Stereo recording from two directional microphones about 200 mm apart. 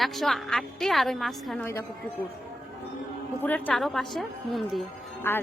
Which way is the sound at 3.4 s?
10° left (ahead or behind).